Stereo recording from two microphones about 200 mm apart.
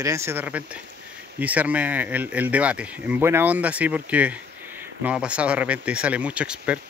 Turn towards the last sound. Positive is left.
turn(degrees=-5)  # may be behind; listen again after turning